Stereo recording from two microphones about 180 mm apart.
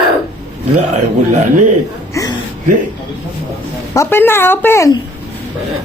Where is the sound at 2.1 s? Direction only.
20° left (ahead or behind).